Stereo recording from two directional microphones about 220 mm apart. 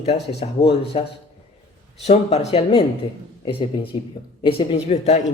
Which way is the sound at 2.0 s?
30° left (ahead or behind).